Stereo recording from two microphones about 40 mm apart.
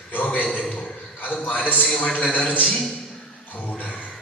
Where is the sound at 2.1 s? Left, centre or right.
Left.